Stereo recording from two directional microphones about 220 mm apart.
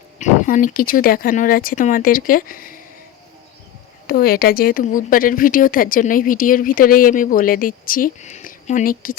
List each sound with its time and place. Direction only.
0.2 s speech: 35° left (ahead or behind)
4.0 s speech: 40° left (ahead or behind)